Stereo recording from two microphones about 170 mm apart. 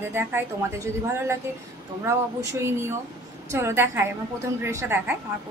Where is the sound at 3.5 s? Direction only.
15° right (ahead or behind).